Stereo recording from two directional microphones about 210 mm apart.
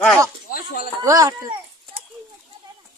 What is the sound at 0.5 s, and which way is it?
Chopping, 45° left (ahead or behind).